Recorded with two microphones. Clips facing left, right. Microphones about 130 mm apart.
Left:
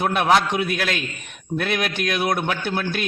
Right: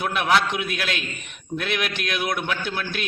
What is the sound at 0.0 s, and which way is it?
A man's voice, 40° left (ahead or behind).